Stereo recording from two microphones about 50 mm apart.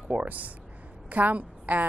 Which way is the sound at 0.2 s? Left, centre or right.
Right.